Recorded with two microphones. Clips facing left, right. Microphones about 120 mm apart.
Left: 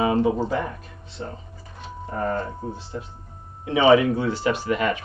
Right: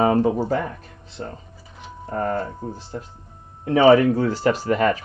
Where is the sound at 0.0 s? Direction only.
45° right (ahead or behind).